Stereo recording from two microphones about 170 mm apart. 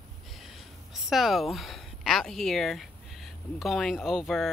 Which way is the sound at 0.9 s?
Centre (ahead or behind).